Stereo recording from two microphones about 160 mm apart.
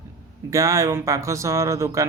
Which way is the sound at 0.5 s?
20° right (ahead or behind).